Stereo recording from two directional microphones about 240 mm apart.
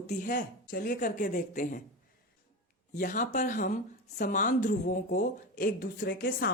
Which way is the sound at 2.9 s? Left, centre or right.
Left.